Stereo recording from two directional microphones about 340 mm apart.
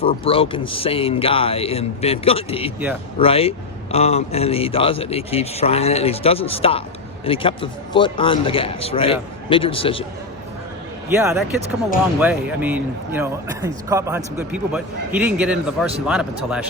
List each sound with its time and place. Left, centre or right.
0.0 s a man's voice: centre
11.1 s a man's voice: centre